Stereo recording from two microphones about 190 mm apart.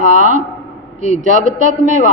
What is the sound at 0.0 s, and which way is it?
A woman's voice, 40° right (ahead or behind).